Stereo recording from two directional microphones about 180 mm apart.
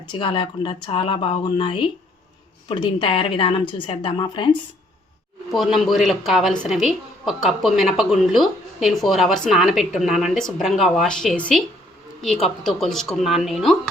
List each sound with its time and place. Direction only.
0.1 s a woman's voice: 25° left (ahead or behind)
5.5 s a woman's voice: centre (ahead or behind)